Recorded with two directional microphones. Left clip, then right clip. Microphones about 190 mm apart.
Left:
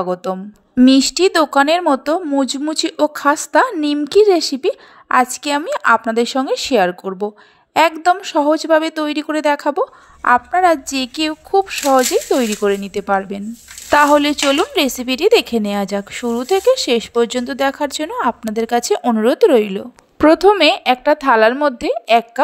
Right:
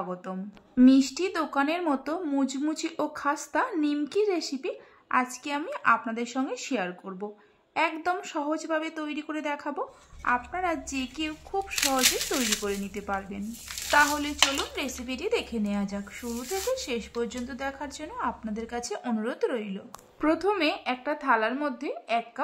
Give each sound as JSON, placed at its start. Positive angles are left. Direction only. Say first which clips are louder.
{"t": 0.1, "sound": "speech", "louder": "left 16 dB", "side_deg": 40}